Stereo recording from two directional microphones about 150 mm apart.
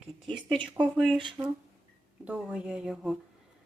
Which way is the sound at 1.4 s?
25° right (ahead or behind).